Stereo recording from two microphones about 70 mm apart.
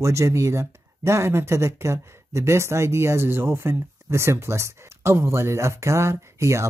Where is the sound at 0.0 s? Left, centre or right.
Right.